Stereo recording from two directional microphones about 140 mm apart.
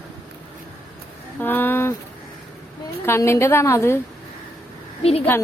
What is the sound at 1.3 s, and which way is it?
Speech, 15° left (ahead or behind).